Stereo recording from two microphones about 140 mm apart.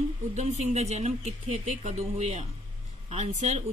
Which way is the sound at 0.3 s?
55° right (ahead or behind).